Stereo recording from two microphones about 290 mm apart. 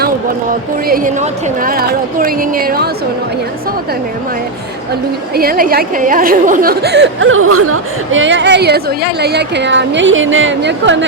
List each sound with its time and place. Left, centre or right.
0.9 s a woman's voice: right
5.3 s speech: right